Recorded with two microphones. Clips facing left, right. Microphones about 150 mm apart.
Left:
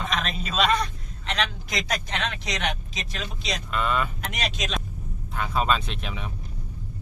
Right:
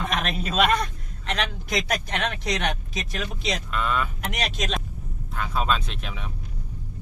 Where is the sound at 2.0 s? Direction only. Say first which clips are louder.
Right 2 dB; 55° right (ahead or behind).